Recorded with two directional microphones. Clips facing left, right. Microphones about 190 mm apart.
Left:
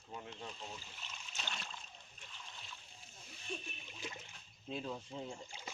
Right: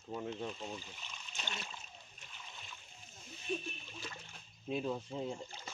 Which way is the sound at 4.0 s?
15° left (ahead or behind).